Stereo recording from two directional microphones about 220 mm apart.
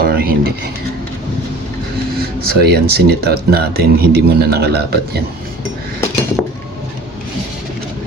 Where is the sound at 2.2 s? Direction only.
45° right (ahead or behind).